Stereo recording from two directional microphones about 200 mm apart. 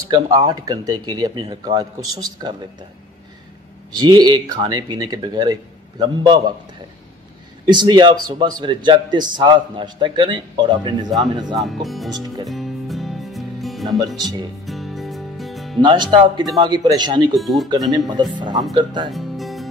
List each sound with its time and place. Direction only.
0.1 s a man's voice: 20° right (ahead or behind)
3.9 s a man's voice: 20° right (ahead or behind)
7.6 s a man's voice: 20° right (ahead or behind)
11.6 s speech: centre (ahead or behind)
12.4 s music: centre (ahead or behind)
14.0 s a man's voice: 20° right (ahead or behind)
14.7 s music: centre (ahead or behind)
15.8 s a man's voice: 25° right (ahead or behind)
17.4 s speech: centre (ahead or behind)
17.6 s a man's voice: 20° right (ahead or behind)
19.0 s music: centre (ahead or behind)